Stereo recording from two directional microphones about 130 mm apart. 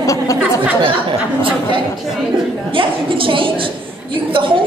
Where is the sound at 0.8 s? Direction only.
40° right (ahead or behind).